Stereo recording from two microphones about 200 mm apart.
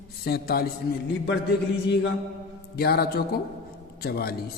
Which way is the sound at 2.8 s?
50° left (ahead or behind).